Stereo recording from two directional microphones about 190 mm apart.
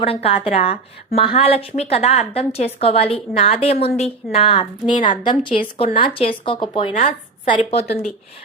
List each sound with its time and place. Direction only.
0.0 s a woman's voice: 30° left (ahead or behind)
5.0 s speech: 25° left (ahead or behind)